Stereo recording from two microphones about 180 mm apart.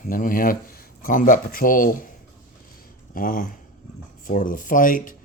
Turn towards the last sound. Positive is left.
turn(degrees=50)  # may be behind; listen again after turning